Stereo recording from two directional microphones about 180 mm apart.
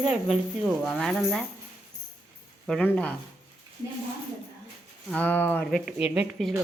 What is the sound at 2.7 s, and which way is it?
Speech, 5° left (ahead or behind).